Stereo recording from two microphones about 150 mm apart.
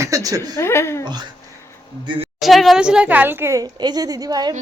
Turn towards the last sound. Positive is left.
turn(degrees=-25)  # may be behind; listen again after turning